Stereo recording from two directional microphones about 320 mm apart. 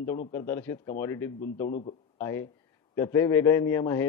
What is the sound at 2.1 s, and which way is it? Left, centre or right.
A man's voice, centre.